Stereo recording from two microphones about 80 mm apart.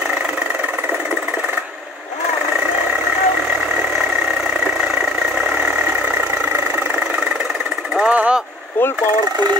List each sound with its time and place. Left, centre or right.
5.5 s vehicle: right
7.9 s vehicle: centre